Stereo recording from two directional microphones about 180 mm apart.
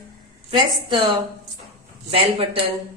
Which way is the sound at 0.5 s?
25° right (ahead or behind).